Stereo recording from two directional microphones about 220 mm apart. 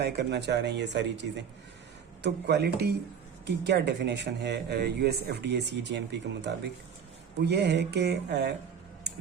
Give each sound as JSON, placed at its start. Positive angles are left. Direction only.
{"t": 0.0, "sound": "speech", "side_deg": -50}